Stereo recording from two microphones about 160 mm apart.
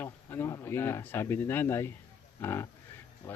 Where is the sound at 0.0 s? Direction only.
15° left (ahead or behind).